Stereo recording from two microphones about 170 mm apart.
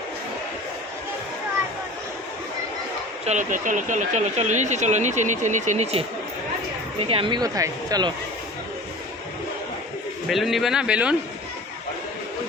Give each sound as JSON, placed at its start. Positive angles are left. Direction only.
{"t": 3.2, "sound": "speech", "side_deg": -50}
{"t": 7.1, "sound": "speech", "side_deg": -30}
{"t": 10.2, "sound": "a man's voice", "side_deg": 0}